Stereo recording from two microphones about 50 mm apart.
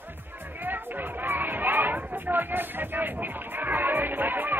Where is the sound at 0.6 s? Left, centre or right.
Right.